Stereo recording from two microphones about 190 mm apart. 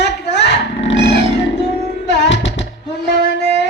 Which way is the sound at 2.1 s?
65° left (ahead or behind).